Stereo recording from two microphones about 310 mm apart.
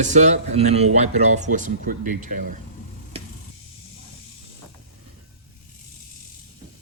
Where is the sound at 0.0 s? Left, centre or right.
Right.